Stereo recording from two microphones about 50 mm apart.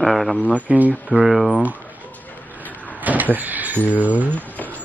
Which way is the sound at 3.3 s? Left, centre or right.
Right.